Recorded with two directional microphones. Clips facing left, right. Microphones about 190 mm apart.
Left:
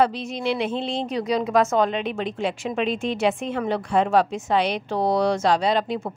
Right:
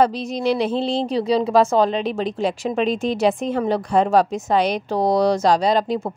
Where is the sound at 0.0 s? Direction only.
40° right (ahead or behind).